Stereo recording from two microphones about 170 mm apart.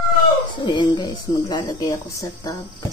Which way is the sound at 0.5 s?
25° left (ahead or behind).